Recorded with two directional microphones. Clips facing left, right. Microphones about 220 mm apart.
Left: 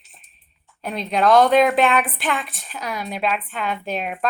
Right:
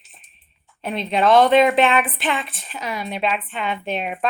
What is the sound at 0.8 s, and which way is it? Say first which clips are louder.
Speech: even; centre (ahead or behind).